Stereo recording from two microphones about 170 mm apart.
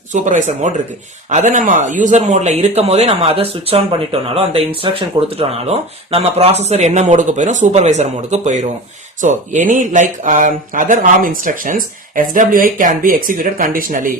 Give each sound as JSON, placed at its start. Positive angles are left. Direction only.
{"t": 0.1, "sound": "speech", "side_deg": -45}